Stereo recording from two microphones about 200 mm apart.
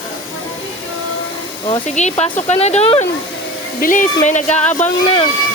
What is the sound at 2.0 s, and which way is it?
Speech, 35° left (ahead or behind).